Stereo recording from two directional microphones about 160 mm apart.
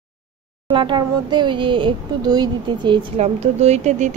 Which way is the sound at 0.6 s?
30° right (ahead or behind).